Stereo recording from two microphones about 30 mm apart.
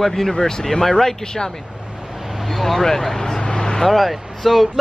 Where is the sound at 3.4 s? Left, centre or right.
Left.